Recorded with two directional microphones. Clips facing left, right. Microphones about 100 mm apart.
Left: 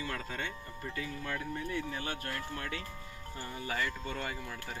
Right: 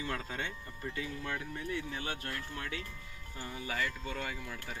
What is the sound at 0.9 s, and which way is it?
Speech, 10° right (ahead or behind).